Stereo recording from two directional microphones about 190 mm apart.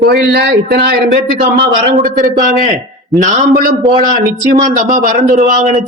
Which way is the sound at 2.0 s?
40° right (ahead or behind).